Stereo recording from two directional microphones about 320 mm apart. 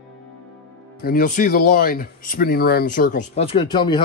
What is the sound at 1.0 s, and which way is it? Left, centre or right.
Speech, left.